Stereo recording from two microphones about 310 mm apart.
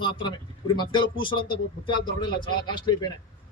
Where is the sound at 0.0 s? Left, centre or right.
Centre.